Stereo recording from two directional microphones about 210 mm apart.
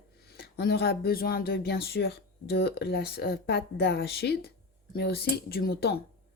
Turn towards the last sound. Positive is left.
turn(degrees=50)  # may be behind; listen again after turning